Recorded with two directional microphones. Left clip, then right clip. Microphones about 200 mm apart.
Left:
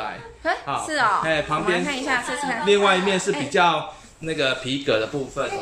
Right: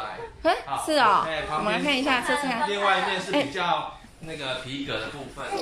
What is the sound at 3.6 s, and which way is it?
Speech, 65° left (ahead or behind).